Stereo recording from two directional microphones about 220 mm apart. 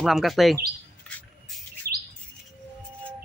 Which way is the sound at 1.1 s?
5° left (ahead or behind).